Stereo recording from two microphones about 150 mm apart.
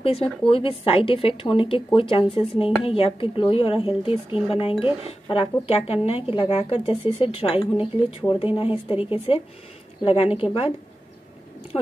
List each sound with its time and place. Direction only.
0.0 s a woman's voice: 40° left (ahead or behind)
7.5 s speech: 10° right (ahead or behind)
8.2 s a woman's voice: 35° left (ahead or behind)